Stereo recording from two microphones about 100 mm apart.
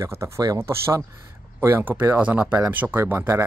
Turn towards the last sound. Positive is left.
turn(degrees=-20)  # may be behind; listen again after turning